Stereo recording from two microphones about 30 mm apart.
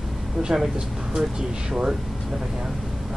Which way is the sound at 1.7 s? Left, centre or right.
Right.